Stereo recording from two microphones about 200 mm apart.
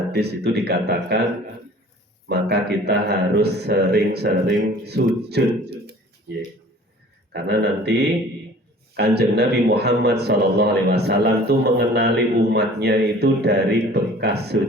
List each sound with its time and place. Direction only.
0.1 s a man's voice: 55° right (ahead or behind)
2.3 s a man's voice: 55° right (ahead or behind)
7.3 s a man's voice: 55° right (ahead or behind)